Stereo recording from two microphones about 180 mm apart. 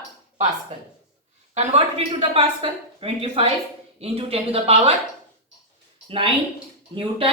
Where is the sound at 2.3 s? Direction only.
30° right (ahead or behind).